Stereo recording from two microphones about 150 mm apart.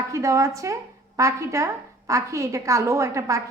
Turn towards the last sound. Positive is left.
turn(degrees=-20)  # may be behind; listen again after turning